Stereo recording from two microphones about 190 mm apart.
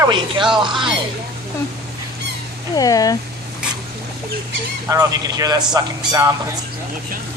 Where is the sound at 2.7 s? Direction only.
20° left (ahead or behind).